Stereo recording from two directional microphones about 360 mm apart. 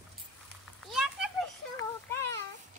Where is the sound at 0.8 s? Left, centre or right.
Centre.